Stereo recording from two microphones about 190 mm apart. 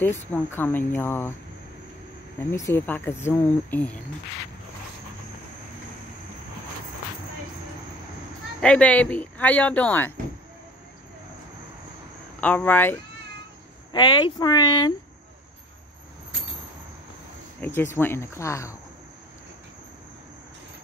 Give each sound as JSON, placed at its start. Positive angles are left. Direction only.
{"t": 0.3, "sound": "speech", "side_deg": 10}
{"t": 2.5, "sound": "speech", "side_deg": 15}
{"t": 8.5, "sound": "speech", "side_deg": 5}
{"t": 12.4, "sound": "speech", "side_deg": 10}
{"t": 13.9, "sound": "speech", "side_deg": 25}
{"t": 17.6, "sound": "speech", "side_deg": 10}